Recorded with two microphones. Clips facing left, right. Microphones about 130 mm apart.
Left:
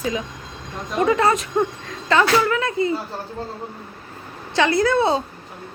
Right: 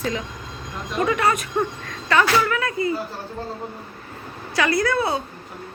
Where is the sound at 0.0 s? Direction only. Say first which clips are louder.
Left 1 dB; 15° left (ahead or behind).